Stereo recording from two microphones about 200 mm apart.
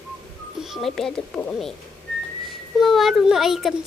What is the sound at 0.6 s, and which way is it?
A child's voice, centre (ahead or behind).